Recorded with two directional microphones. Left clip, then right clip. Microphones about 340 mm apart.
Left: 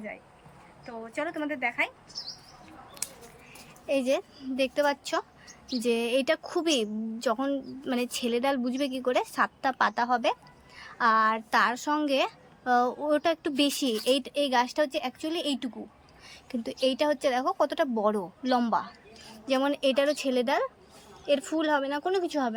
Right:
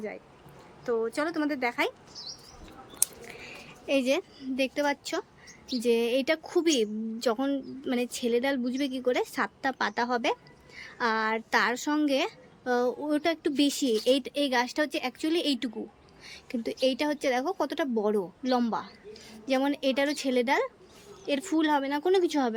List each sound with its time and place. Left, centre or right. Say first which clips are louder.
0.9 s a woman's voice: right 6 dB; centre
3.0 s scissors: right 7 dB; right
3.8 s a woman's voice: even; centre